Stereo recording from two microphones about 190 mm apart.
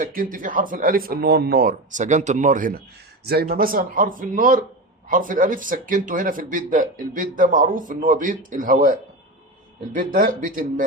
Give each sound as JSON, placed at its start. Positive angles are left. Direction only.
{"t": 0.0, "sound": "speech", "side_deg": -45}